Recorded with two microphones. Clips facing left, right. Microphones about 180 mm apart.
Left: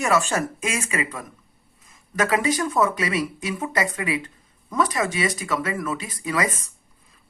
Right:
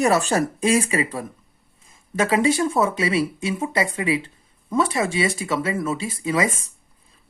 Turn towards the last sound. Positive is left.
turn(degrees=-25)  # may be behind; listen again after turning